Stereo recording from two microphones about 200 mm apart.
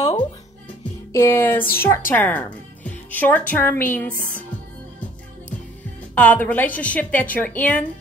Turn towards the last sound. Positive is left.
turn(degrees=10)  # may be behind; listen again after turning